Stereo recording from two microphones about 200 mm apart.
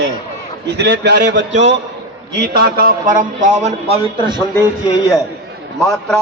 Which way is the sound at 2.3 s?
50° right (ahead or behind).